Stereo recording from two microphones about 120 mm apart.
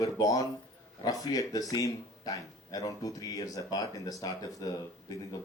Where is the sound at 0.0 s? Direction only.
30° left (ahead or behind).